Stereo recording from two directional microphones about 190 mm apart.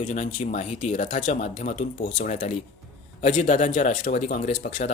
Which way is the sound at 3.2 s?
30° left (ahead or behind).